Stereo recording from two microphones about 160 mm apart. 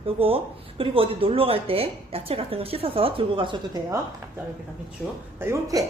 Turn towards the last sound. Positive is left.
turn(degrees=-20)  # may be behind; listen again after turning